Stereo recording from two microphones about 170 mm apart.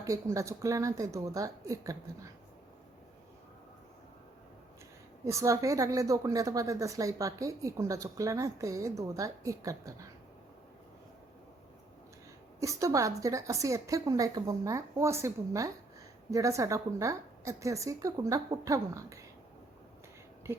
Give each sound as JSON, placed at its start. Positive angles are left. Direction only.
{"t": 0.0, "sound": "a woman's voice", "side_deg": -20}
{"t": 5.2, "sound": "a woman's voice", "side_deg": -15}
{"t": 12.5, "sound": "a woman's voice", "side_deg": -20}
{"t": 20.4, "sound": "speech", "side_deg": -15}